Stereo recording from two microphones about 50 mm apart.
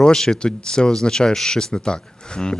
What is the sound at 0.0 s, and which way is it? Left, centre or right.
Speech, centre.